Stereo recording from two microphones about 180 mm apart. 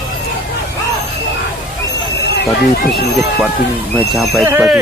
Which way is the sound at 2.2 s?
65° left (ahead or behind).